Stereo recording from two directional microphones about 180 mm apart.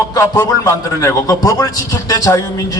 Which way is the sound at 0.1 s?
20° left (ahead or behind).